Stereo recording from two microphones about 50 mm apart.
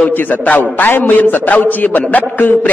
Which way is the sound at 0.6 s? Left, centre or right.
Left.